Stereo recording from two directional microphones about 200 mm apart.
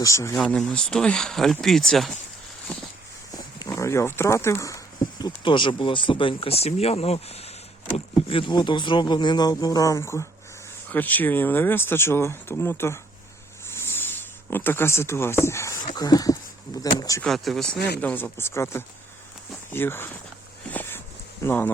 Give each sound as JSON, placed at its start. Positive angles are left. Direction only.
{"t": 0.0, "sound": "speech", "side_deg": 15}
{"t": 0.3, "sound": "speech", "side_deg": 5}
{"t": 3.3, "sound": "a sound", "side_deg": 20}
{"t": 5.2, "sound": "speech", "side_deg": 25}
{"t": 13.7, "sound": "a sound", "side_deg": 10}
{"t": 14.5, "sound": "speech", "side_deg": 10}
{"t": 17.2, "sound": "speech", "side_deg": 0}
{"t": 17.7, "sound": "speech", "side_deg": 55}
{"t": 18.0, "sound": "speech", "side_deg": 10}
{"t": 20.7, "sound": "a sound", "side_deg": 10}
{"t": 21.4, "sound": "speech", "side_deg": 10}